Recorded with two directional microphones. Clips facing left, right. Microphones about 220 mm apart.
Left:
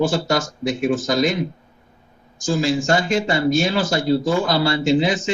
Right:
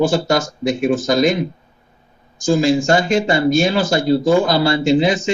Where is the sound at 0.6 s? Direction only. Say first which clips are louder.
Right 3 dB; 15° right (ahead or behind).